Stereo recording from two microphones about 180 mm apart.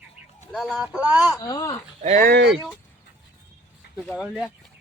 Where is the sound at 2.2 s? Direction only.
70° right (ahead or behind).